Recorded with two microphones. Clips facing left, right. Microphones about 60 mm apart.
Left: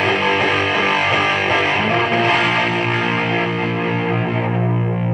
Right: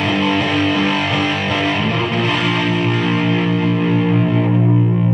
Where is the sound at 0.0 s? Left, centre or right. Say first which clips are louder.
Even; left.